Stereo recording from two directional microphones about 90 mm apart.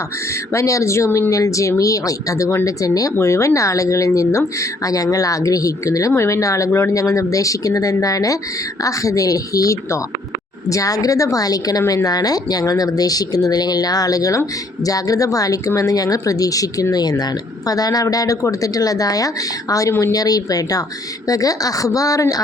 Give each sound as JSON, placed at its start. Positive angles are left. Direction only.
{"t": 0.5, "sound": "speech", "side_deg": 35}
{"t": 11.8, "sound": "speech", "side_deg": 30}
{"t": 12.0, "sound": "speech", "side_deg": 45}